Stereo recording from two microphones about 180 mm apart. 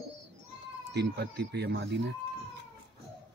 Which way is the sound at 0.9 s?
70° right (ahead or behind).